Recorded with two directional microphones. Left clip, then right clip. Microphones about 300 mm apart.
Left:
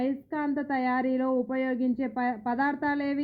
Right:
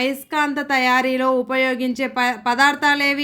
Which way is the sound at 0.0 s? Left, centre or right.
Centre.